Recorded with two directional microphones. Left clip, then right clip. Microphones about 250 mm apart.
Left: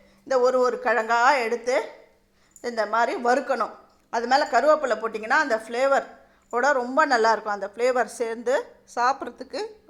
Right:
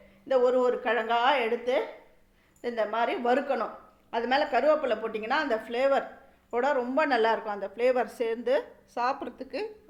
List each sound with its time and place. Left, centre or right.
0.3 s a woman's voice: centre